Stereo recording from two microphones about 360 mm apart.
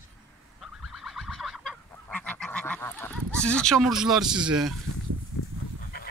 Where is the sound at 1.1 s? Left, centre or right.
Centre.